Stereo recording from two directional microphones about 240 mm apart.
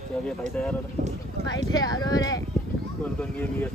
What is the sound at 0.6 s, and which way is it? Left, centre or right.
Speech, centre.